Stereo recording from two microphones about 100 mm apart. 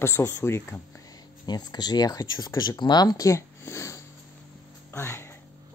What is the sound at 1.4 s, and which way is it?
Speech, 45° left (ahead or behind).